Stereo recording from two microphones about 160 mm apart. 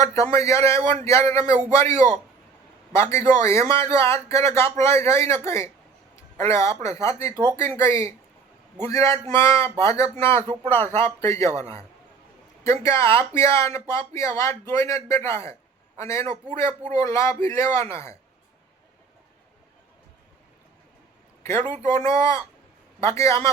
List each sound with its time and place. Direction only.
0.0 s speech: 20° left (ahead or behind)
10.4 s speech: 35° right (ahead or behind)
10.7 s speech: 15° left (ahead or behind)
21.4 s speech: 15° left (ahead or behind)